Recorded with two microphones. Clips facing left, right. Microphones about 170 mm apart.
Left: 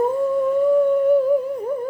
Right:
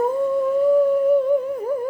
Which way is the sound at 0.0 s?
Centre (ahead or behind).